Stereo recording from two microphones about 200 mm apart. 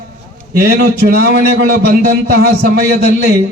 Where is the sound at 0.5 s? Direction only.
50° right (ahead or behind).